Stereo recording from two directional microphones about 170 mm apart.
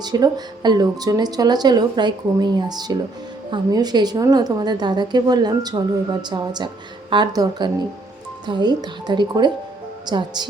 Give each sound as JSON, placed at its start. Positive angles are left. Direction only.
{"t": 0.0, "sound": "a woman's voice", "side_deg": -25}